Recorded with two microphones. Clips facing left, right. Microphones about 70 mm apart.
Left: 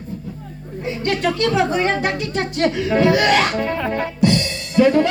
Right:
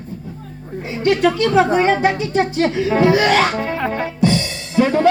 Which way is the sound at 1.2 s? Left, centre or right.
Right.